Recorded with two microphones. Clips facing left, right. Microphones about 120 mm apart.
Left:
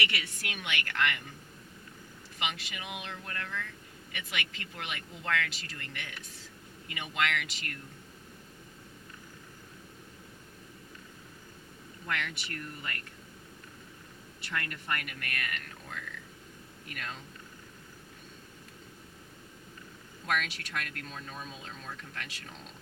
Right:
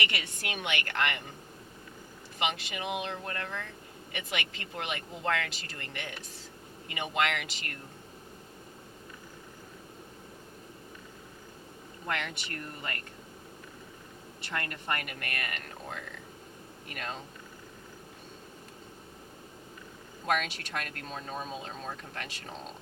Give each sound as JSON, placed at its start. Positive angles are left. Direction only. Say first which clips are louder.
{"t": 0.1, "sound": "speech", "louder": "right 2 dB", "side_deg": -30}
{"t": 2.4, "sound": "speech", "louder": "right 5 dB", "side_deg": -35}
{"t": 12.0, "sound": "speech", "louder": "right 1 dB", "side_deg": -30}
{"t": 14.4, "sound": "speech", "louder": "right 2 dB", "side_deg": -35}
{"t": 20.2, "sound": "speech", "louder": "right 3 dB", "side_deg": -35}